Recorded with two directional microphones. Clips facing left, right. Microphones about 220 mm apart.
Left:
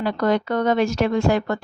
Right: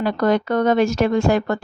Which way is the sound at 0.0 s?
45° right (ahead or behind).